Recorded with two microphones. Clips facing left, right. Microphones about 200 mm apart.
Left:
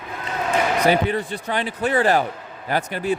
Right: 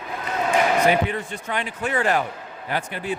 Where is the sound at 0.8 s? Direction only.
35° left (ahead or behind).